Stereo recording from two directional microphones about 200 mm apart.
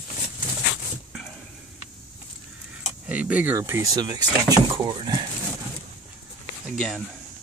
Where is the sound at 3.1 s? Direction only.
5° right (ahead or behind); by 5.2 s 25° right (ahead or behind).